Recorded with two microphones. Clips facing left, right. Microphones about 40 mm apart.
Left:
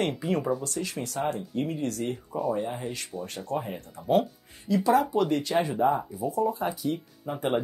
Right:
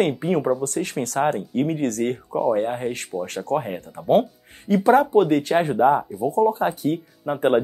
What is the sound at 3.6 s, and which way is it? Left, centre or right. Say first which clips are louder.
Speech: right 7 dB; right.